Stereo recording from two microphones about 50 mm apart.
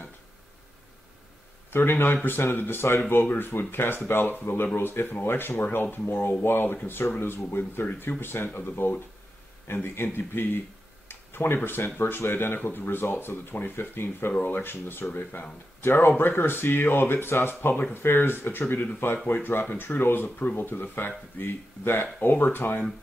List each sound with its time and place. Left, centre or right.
1.7 s speech: left